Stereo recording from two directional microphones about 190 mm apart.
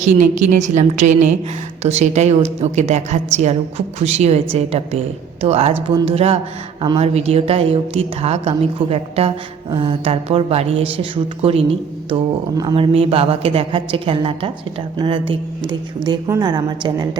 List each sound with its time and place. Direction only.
0.0 s a woman's voice: 40° right (ahead or behind)
5.7 s a woman's voice: 20° right (ahead or behind)
6.1 s a woman's voice: 30° right (ahead or behind)